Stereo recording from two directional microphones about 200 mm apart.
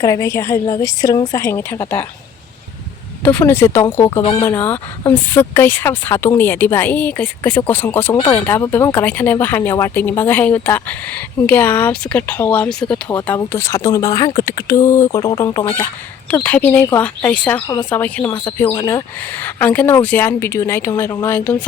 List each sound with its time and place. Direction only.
0.0 s speech: 15° left (ahead or behind)
3.2 s speech: 10° left (ahead or behind)
4.4 s speech: 10° left (ahead or behind)
17.7 s speech: 20° left (ahead or behind)
17.9 s speech: 10° left (ahead or behind)